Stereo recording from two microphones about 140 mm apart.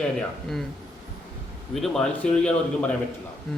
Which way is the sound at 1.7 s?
Centre (ahead or behind).